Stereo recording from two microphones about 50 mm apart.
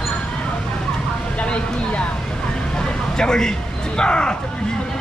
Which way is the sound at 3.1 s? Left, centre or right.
Centre.